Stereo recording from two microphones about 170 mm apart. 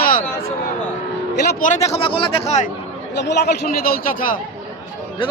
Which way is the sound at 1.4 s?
70° left (ahead or behind).